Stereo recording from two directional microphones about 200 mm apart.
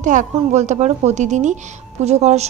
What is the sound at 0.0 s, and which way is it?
Speech, 40° right (ahead or behind).